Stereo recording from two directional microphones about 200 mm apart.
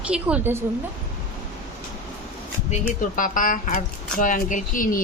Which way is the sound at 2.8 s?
40° left (ahead or behind).